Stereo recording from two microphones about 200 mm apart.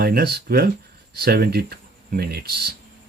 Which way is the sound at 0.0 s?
50° right (ahead or behind).